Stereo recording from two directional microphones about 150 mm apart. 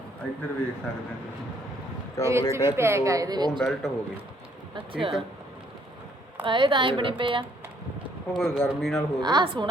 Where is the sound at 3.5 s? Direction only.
Centre (ahead or behind).